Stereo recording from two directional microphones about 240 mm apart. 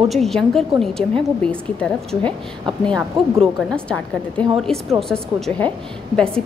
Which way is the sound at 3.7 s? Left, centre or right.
Centre.